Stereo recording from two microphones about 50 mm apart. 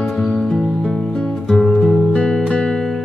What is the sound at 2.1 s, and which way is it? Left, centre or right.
Music, centre.